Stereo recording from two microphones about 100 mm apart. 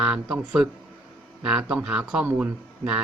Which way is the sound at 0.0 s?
5° right (ahead or behind).